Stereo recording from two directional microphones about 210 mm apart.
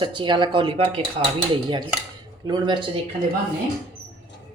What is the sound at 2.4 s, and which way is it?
Speech, 20° right (ahead or behind).